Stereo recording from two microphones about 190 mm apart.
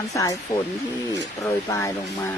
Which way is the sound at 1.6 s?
15° left (ahead or behind).